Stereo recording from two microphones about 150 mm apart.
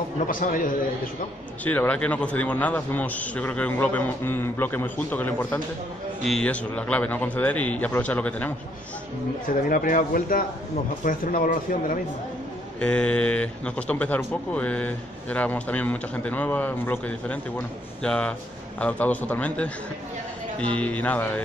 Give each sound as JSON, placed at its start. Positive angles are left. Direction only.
{"t": 0.3, "sound": "speech", "side_deg": 65}
{"t": 1.6, "sound": "a man's voice", "side_deg": 10}
{"t": 9.5, "sound": "speech", "side_deg": 70}
{"t": 12.8, "sound": "a man's voice", "side_deg": 5}